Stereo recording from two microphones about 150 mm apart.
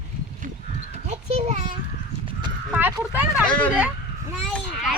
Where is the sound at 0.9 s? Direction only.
45° right (ahead or behind).